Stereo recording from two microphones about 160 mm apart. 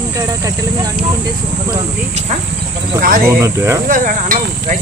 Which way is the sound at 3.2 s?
15° right (ahead or behind).